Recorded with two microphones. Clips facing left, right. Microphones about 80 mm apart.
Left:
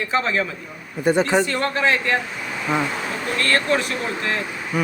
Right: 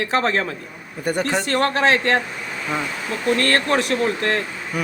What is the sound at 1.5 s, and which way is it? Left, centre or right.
Speech, right.